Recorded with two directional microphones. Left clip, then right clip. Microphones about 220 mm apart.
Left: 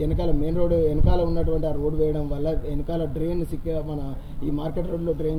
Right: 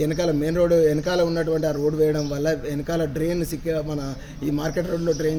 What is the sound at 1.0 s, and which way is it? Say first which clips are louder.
Speech: right 4 dB; 45° right (ahead or behind).